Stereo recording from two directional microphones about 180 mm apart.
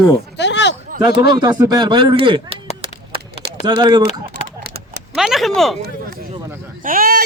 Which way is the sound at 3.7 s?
25° right (ahead or behind).